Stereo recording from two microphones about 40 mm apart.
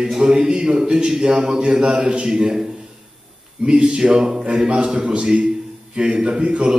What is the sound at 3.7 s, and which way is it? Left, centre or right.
A man's voice, right.